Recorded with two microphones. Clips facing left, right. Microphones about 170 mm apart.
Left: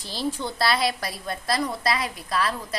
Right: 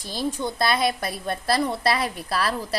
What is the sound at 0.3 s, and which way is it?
A woman's voice, 20° right (ahead or behind).